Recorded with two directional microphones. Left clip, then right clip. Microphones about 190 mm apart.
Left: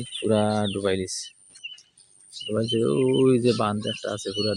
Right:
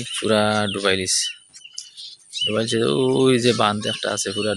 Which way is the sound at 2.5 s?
Centre (ahead or behind).